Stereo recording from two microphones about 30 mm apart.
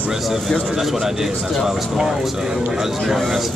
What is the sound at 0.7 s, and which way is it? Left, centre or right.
A man's voice, centre.